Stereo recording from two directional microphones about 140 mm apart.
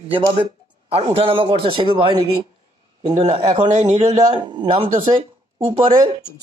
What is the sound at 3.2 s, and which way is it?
Speech, 40° right (ahead or behind).